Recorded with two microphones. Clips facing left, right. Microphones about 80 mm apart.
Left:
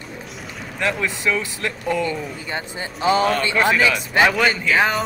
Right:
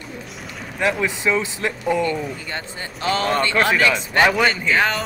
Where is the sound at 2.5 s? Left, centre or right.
Centre.